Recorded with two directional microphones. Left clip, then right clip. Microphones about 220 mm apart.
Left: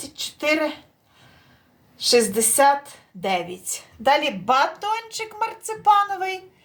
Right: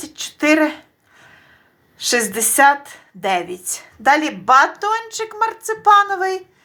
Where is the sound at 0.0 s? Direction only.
20° right (ahead or behind).